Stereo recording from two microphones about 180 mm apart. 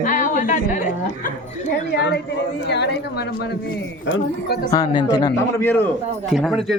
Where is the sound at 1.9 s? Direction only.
80° left.